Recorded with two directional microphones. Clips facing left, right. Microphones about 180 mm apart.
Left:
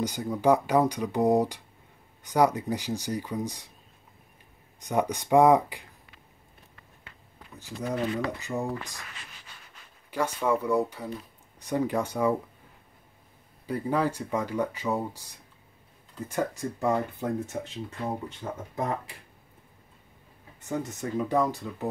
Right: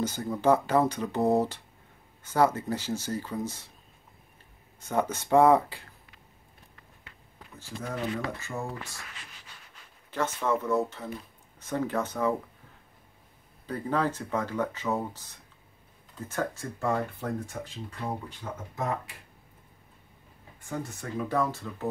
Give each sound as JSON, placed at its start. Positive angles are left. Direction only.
{"t": 0.0, "sound": "speech", "side_deg": 15}
{"t": 4.7, "sound": "speech", "side_deg": 15}
{"t": 7.5, "sound": "speech", "side_deg": 15}
{"t": 10.1, "sound": "speech", "side_deg": 10}
{"t": 13.7, "sound": "speech", "side_deg": 10}
{"t": 20.6, "sound": "speech", "side_deg": 20}